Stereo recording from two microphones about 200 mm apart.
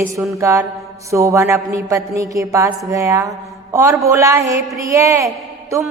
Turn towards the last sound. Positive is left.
turn(degrees=-15)  # may be behind; listen again after turning